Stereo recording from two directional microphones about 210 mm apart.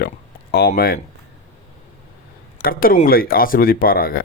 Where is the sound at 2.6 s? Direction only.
45° left (ahead or behind).